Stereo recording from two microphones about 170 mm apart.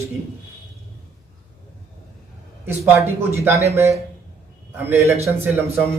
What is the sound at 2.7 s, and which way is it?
A man's voice, 10° right (ahead or behind).